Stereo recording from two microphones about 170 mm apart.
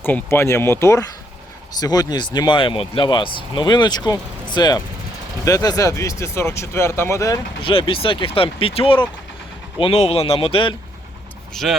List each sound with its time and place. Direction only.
0.0 s speech: 15° left (ahead or behind)
7.6 s speech: 30° left (ahead or behind)
11.5 s speech: centre (ahead or behind)